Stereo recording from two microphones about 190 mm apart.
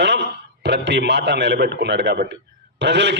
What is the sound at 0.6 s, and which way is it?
A man's voice, 65° right (ahead or behind).